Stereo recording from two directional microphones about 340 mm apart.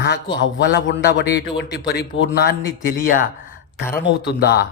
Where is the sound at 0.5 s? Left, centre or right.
Left.